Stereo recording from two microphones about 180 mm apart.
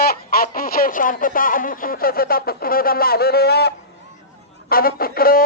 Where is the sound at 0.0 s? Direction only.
60° left (ahead or behind).